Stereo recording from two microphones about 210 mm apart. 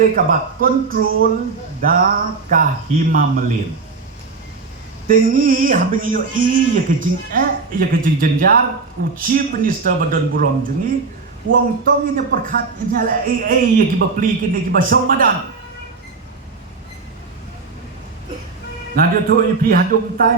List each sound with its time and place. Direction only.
0.0 s a man's voice: 40° right (ahead or behind)
5.0 s a man's voice: 40° right (ahead or behind)
11.5 s a man's voice: 45° right (ahead or behind)
18.9 s a man's voice: 45° right (ahead or behind)